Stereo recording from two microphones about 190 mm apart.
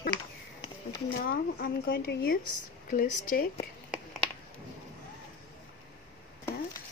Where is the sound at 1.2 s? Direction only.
50° left (ahead or behind).